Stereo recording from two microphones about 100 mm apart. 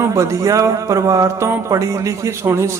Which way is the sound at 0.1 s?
30° right (ahead or behind).